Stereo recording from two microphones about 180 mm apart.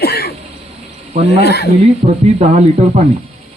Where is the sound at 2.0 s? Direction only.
40° right (ahead or behind).